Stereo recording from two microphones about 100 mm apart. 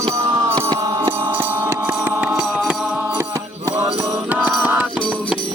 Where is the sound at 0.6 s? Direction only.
45° right (ahead or behind).